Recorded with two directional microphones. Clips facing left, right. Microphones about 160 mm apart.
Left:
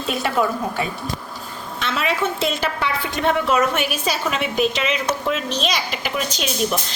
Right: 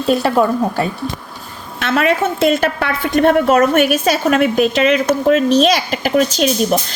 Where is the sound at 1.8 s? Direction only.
55° right (ahead or behind).